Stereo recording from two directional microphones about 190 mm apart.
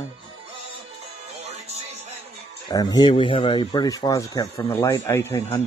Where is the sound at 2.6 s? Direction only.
20° left (ahead or behind).